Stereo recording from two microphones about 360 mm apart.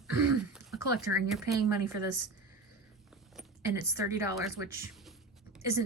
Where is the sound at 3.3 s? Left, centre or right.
Centre.